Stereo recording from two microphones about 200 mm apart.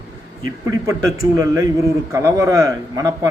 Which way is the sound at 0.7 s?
15° right (ahead or behind).